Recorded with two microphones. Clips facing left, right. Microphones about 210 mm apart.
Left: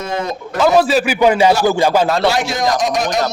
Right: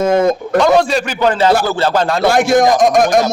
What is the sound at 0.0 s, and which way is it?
Speech, 50° right (ahead or behind).